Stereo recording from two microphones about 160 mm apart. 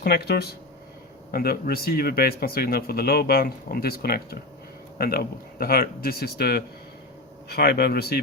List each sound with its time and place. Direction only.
0.0 s speech: 75° left (ahead or behind)
1.3 s speech: 70° left (ahead or behind)